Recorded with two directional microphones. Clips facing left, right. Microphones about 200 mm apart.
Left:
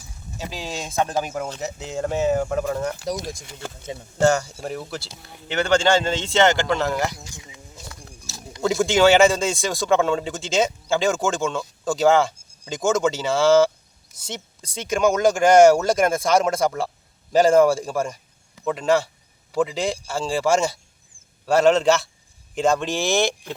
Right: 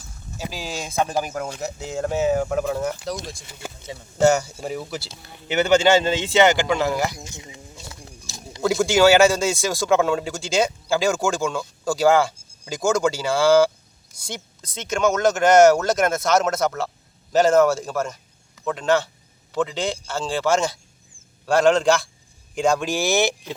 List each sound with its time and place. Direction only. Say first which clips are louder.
0.3 s a man's voice: even; centre (ahead or behind)
2.9 s speech: left 2 dB; 10° left (ahead or behind)
4.2 s a man's voice: right 1 dB; 10° right (ahead or behind)
7.1 s speech: right 3 dB; 20° right (ahead or behind)
8.6 s a man's voice: right 1 dB; centre (ahead or behind)